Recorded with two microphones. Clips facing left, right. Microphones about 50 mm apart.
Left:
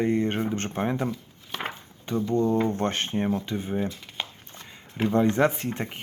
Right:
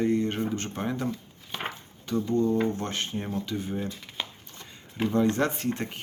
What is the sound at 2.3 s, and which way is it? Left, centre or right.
Speech, left.